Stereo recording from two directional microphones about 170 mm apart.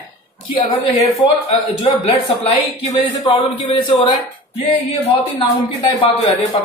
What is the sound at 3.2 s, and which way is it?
A man's voice, 30° left (ahead or behind).